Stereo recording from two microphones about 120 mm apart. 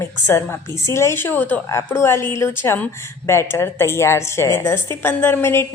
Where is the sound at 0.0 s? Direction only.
20° left (ahead or behind).